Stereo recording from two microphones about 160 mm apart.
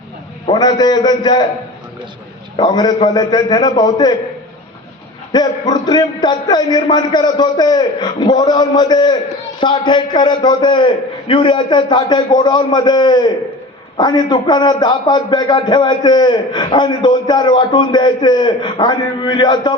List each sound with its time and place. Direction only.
0.4 s a man's voice: 25° left (ahead or behind)
2.6 s a man's voice: 25° left (ahead or behind)
5.3 s a man's voice: 25° left (ahead or behind)